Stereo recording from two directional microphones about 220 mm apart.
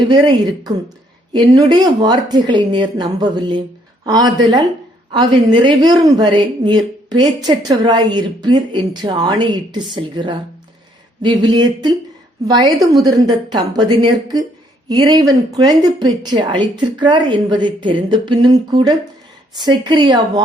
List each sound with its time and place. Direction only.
0.1 s a woman's voice: 20° right (ahead or behind)